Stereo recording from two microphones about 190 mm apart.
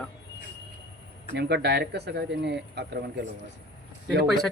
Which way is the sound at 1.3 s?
60° right (ahead or behind).